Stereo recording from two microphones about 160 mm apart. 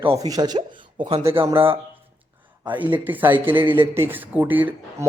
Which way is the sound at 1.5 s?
15° right (ahead or behind).